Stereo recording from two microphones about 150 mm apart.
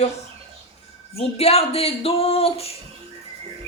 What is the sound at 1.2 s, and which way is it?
Speech, 45° left (ahead or behind).